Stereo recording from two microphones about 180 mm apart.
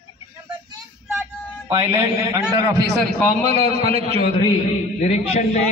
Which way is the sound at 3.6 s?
35° right (ahead or behind).